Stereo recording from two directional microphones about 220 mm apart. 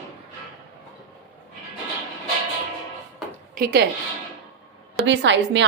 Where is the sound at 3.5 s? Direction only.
45° right (ahead or behind).